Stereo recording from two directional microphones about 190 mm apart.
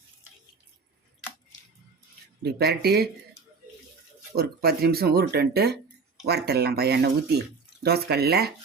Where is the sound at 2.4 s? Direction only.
55° right (ahead or behind).